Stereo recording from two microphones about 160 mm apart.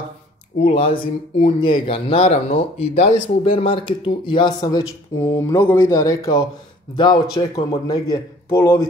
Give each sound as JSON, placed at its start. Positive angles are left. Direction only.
{"t": 0.6, "sound": "a man's voice", "side_deg": 40}